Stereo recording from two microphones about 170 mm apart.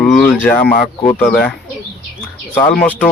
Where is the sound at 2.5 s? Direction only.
10° left (ahead or behind).